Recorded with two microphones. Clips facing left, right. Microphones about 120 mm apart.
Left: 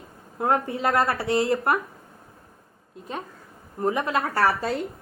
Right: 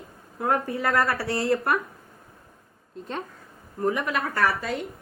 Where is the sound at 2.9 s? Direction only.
10° left (ahead or behind).